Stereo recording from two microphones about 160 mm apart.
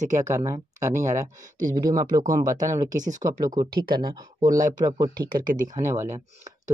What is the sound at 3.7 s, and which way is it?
Speech, 70° right (ahead or behind).